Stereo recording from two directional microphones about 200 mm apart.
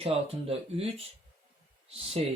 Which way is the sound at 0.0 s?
30° right (ahead or behind).